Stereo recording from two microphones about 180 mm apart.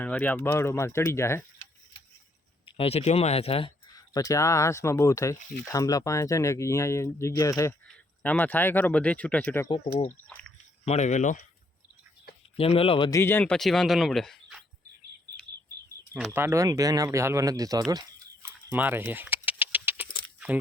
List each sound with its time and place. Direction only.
0.0 s speech: 10° left (ahead or behind)
2.6 s speech: 30° left (ahead or behind)
3.9 s speech: 20° left (ahead or behind)
9.6 s speech: 30° left (ahead or behind)
12.5 s speech: 30° left (ahead or behind)
13.1 s speech: 15° left (ahead or behind)
16.1 s speech: 10° right (ahead or behind)
18.4 s a sound: 10° right (ahead or behind)